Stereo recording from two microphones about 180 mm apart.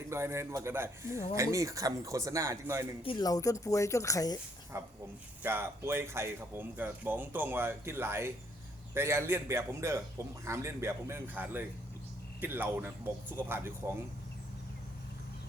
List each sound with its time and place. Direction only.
0.1 s speech: 15° right (ahead or behind)
3.0 s speech: 25° left (ahead or behind)
4.7 s speech: 15° right (ahead or behind)